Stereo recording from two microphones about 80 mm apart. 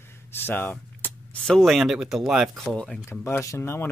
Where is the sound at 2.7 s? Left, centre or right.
Centre.